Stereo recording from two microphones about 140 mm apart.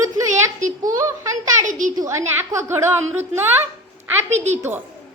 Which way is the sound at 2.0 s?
20° right (ahead or behind).